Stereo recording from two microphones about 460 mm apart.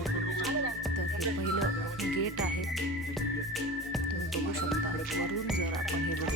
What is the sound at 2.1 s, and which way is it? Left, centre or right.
Music, left.